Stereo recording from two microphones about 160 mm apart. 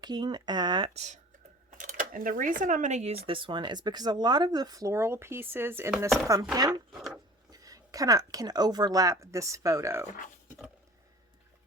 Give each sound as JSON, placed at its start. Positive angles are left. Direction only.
{"t": 0.0, "sound": "speech", "side_deg": -25}
{"t": 0.9, "sound": "speech", "side_deg": -45}
{"t": 3.2, "sound": "speech", "side_deg": -35}
{"t": 6.9, "sound": "wood", "side_deg": -5}
{"t": 7.5, "sound": "speech", "side_deg": -20}